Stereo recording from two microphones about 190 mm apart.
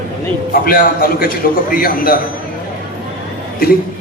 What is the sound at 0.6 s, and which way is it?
A man's voice, 50° left (ahead or behind).